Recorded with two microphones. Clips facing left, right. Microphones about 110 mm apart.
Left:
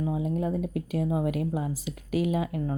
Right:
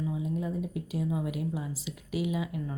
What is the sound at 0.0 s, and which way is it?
Speech, 60° left (ahead or behind).